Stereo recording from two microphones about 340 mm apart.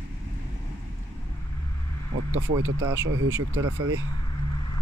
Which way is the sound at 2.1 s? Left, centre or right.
Right.